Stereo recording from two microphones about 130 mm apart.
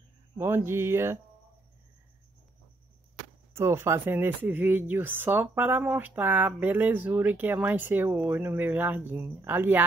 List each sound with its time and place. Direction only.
0.4 s speech: 20° right (ahead or behind)
3.5 s speech: 20° right (ahead or behind)